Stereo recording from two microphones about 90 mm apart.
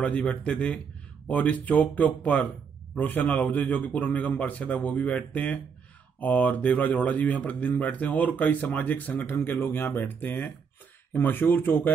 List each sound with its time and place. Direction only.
0.0 s speech: 15° left (ahead or behind)